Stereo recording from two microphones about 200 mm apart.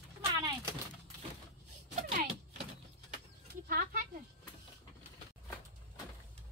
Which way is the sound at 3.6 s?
45° right (ahead or behind).